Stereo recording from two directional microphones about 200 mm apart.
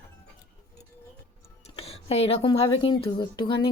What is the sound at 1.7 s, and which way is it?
Speech, 30° left (ahead or behind).